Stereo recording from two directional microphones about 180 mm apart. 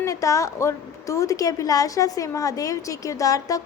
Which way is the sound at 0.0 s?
15° left (ahead or behind).